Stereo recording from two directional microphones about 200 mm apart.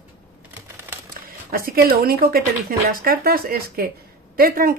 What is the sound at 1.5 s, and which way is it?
A woman's voice, 50° right (ahead or behind).